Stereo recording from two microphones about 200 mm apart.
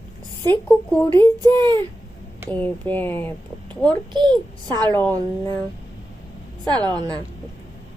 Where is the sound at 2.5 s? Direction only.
10° left (ahead or behind).